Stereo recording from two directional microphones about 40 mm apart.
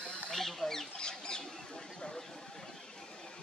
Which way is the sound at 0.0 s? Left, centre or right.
Left.